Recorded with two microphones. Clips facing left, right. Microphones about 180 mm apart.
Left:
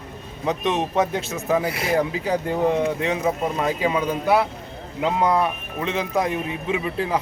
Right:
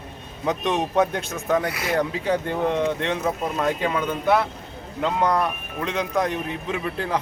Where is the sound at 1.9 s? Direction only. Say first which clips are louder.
Right 1 dB; 5° left (ahead or behind).